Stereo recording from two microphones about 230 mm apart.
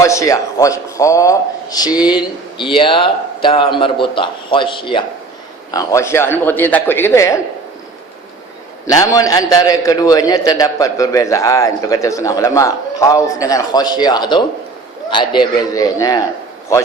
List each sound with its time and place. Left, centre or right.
0.0 s a man's voice: centre
8.9 s a man's voice: centre